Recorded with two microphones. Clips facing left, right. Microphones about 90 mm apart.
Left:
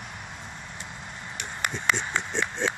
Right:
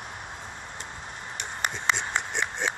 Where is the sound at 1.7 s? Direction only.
20° right (ahead or behind).